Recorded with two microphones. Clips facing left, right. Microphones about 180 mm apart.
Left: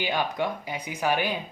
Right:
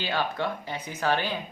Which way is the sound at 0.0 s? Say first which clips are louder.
Left 1 dB; 15° left (ahead or behind).